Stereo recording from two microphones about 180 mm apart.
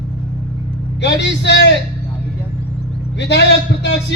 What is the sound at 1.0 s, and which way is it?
Speech, 75° left (ahead or behind).